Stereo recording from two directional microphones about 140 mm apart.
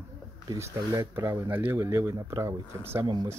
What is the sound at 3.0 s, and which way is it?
Speech, 30° right (ahead or behind).